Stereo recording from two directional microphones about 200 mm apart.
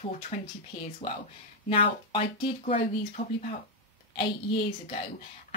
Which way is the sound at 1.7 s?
25° left (ahead or behind).